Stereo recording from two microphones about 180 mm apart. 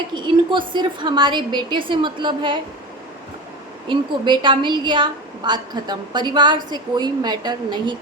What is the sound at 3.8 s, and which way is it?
A woman's voice, 25° right (ahead or behind).